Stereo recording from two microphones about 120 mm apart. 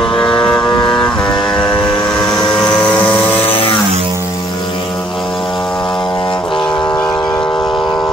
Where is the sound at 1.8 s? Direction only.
40° left (ahead or behind).